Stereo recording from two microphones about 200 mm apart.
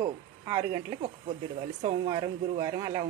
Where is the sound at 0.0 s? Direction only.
15° right (ahead or behind).